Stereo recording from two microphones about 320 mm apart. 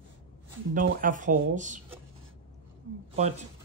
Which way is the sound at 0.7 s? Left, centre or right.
Right.